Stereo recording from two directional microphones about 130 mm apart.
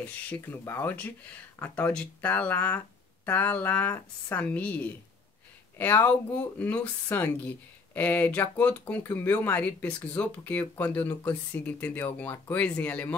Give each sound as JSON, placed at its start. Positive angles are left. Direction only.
{"t": 0.3, "sound": "speech", "side_deg": 15}